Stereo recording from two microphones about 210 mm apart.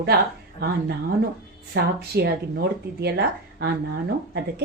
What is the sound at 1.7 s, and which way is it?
A woman's voice, 50° right (ahead or behind).